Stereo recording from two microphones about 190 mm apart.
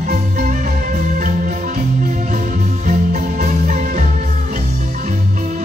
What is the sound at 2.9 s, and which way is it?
Music, 40° right (ahead or behind).